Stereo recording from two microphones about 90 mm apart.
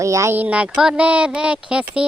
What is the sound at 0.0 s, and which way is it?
Speech, 35° right (ahead or behind).